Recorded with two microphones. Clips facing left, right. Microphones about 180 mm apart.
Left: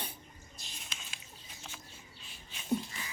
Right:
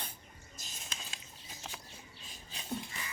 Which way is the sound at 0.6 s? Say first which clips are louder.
Right 3 dB; 45° right (ahead or behind).